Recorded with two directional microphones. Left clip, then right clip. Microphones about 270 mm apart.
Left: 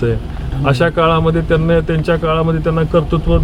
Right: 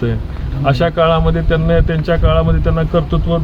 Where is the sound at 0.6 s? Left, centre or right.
Centre.